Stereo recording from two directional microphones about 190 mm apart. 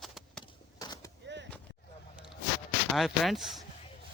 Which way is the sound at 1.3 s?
70° right (ahead or behind).